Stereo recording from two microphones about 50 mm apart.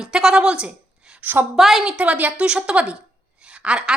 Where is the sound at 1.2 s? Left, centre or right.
Right.